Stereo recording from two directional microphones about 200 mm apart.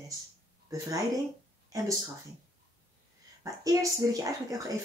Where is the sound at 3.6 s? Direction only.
15° right (ahead or behind).